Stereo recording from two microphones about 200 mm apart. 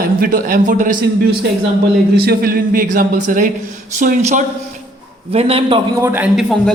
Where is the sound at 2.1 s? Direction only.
50° right (ahead or behind); by 5.8 s 30° right (ahead or behind).